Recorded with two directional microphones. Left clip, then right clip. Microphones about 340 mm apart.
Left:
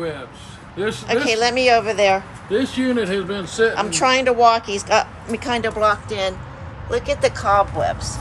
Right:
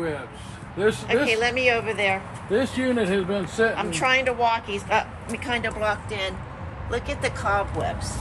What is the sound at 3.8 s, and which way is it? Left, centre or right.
A woman's voice, centre.